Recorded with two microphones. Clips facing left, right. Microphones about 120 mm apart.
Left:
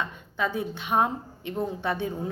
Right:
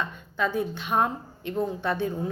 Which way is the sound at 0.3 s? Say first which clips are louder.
Right 2 dB; 20° left (ahead or behind).